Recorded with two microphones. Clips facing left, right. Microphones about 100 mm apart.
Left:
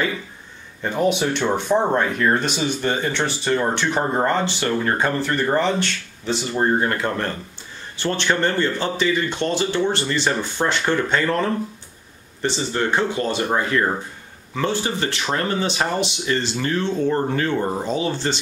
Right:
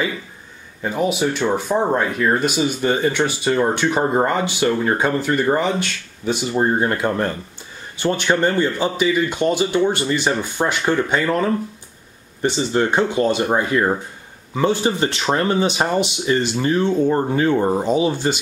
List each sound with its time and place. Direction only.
0.8 s speech: 5° right (ahead or behind)